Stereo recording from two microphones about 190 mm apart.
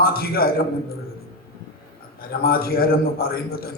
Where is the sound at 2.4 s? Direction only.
55° left (ahead or behind).